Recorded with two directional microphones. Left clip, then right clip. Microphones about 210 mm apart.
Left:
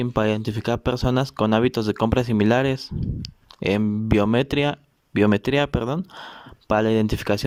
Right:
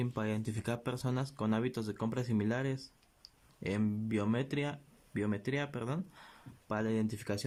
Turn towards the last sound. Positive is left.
turn(degrees=35)  # may be behind; listen again after turning